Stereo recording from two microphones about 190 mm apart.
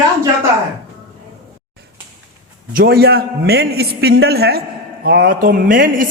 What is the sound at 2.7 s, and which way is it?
A man's voice, 55° right (ahead or behind).